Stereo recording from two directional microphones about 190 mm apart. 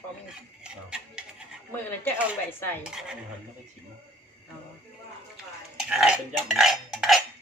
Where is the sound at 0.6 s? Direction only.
5° right (ahead or behind).